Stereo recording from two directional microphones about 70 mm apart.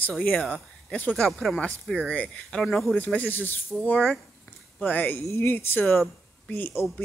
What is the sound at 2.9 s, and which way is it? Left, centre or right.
Speech, left.